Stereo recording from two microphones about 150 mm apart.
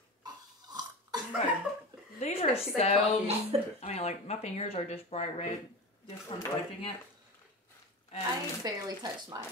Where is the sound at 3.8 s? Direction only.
45° left (ahead or behind).